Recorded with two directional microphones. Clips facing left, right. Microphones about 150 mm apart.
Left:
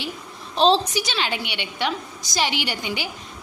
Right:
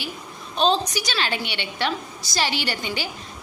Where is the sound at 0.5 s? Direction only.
30° left (ahead or behind).